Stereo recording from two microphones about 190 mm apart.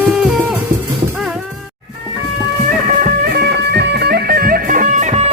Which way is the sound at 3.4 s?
60° right (ahead or behind).